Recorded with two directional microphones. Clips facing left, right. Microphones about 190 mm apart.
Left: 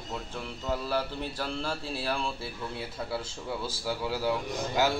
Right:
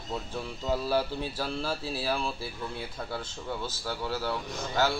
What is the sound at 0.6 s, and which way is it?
Speech, 10° right (ahead or behind).